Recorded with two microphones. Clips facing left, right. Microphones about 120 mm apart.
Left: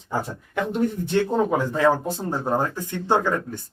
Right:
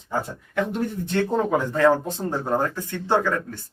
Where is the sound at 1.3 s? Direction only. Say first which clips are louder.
Even; 10° left (ahead or behind).